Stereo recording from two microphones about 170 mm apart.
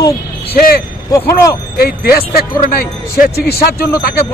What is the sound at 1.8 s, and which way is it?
A man's voice, 65° left (ahead or behind).